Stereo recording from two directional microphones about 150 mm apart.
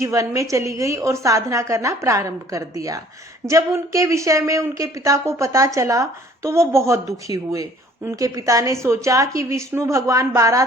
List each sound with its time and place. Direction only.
0.0 s speech: 20° right (ahead or behind)